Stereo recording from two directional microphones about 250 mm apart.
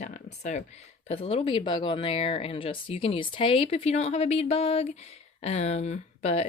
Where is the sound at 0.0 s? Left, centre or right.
Left.